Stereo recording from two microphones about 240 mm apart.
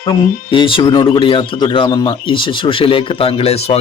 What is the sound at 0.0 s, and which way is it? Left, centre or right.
Speech, centre.